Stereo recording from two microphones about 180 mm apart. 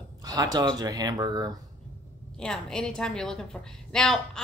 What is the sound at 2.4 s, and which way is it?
A woman's voice, 5° left (ahead or behind).